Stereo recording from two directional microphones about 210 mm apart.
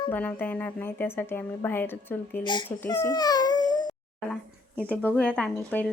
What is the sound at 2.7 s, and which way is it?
Baby cry, 10° left (ahead or behind).